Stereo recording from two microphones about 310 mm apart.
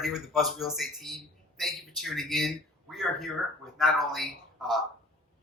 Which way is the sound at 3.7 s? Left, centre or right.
Centre.